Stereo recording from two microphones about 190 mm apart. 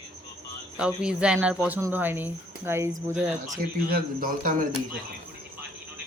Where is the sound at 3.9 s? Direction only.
50° right (ahead or behind).